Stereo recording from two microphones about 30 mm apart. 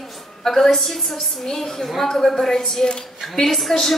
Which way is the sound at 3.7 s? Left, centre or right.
Left.